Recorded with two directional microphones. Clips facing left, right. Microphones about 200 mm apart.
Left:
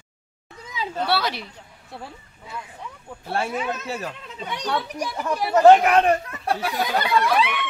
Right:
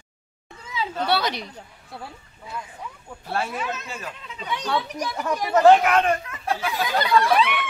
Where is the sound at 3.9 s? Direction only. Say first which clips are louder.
Left 5 dB; 45° left (ahead or behind).